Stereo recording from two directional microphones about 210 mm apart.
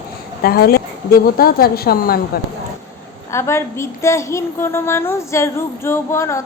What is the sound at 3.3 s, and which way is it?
A woman's voice, 10° left (ahead or behind).